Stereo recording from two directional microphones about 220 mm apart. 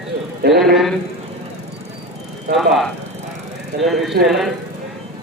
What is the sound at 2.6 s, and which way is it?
Speech, centre (ahead or behind).